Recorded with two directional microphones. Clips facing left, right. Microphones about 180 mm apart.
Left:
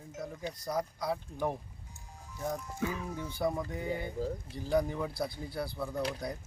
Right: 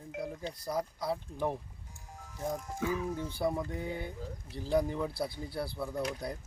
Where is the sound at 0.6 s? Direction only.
5° right (ahead or behind).